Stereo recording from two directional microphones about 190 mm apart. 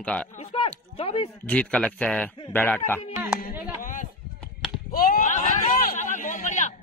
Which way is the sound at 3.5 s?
10° right (ahead or behind).